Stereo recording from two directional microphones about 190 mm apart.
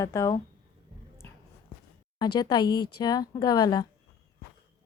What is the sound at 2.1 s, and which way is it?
Speech, 20° left (ahead or behind).